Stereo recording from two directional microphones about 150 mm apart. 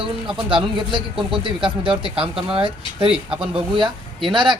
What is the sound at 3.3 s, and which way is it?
Speech, 5° right (ahead or behind).